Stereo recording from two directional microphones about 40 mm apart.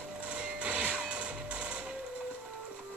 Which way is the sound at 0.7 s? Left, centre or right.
Right.